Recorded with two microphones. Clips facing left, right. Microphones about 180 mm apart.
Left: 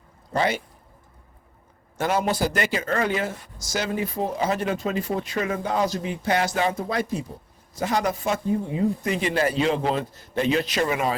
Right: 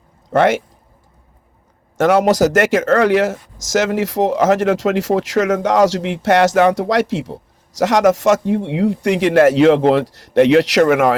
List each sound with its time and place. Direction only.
0.3 s speech: 80° right
2.0 s speech: 75° right (ahead or behind)
3.6 s speech: 90° right